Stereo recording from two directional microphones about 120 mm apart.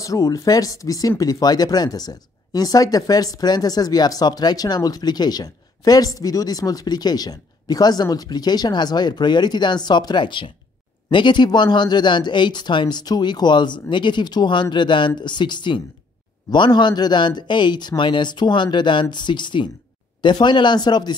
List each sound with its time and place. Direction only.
0.0 s speech: 30° left (ahead or behind)